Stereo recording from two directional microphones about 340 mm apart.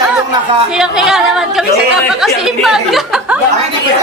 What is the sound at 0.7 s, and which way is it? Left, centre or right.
Speech, centre.